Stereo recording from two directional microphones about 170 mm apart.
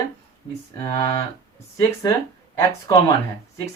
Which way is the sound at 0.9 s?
20° left (ahead or behind).